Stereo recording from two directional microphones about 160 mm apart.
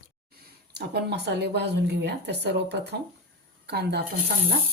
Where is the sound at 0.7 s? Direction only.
90° right.